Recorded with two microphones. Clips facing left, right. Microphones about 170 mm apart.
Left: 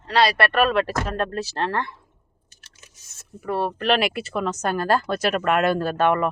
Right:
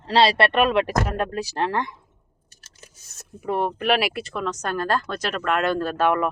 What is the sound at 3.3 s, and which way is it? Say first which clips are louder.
Speech: right 1 dB; 20° right (ahead or behind).